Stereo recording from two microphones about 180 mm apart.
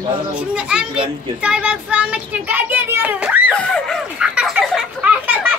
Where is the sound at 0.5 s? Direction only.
5° right (ahead or behind).